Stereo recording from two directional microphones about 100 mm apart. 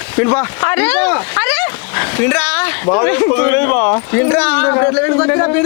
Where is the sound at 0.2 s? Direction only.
25° left (ahead or behind).